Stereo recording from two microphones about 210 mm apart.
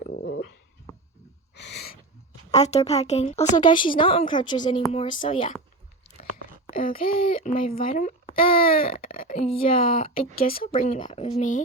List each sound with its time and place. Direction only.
0.1 s dog: 55° left (ahead or behind)
1.5 s a sound: 55° left (ahead or behind)
2.6 s a woman's voice: 30° left (ahead or behind)
6.7 s speech: 25° left (ahead or behind)
7.4 s speech: 40° left (ahead or behind)
8.3 s a woman's voice: 25° left (ahead or behind)
10.3 s speech: 45° left (ahead or behind)
10.8 s speech: 30° left (ahead or behind)